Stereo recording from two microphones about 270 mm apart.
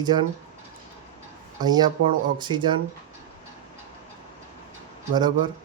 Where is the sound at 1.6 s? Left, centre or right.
Centre.